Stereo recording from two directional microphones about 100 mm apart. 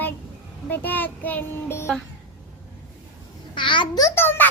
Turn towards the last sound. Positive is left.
turn(degrees=20)  # may be behind; listen again after turning